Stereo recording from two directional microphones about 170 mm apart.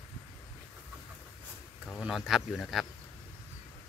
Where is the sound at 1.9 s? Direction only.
Centre (ahead or behind).